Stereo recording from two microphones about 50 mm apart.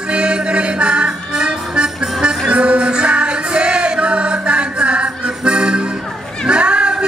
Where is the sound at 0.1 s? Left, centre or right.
Right.